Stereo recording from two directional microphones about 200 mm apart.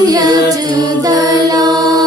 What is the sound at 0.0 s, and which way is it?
Music, 20° right (ahead or behind).